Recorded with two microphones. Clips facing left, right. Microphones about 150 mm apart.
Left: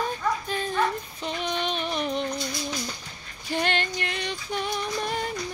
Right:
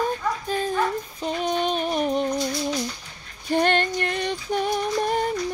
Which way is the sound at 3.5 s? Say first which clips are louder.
Right 6 dB; 50° right (ahead or behind).